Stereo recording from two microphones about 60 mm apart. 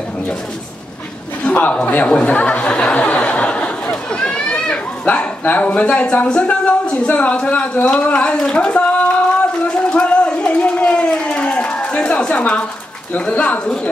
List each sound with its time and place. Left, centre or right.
1.4 s a man's voice: left
3.9 s a sound: centre
13.2 s speech: left